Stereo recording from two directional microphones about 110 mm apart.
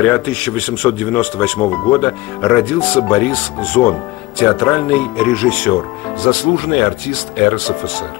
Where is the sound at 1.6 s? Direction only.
20° left (ahead or behind).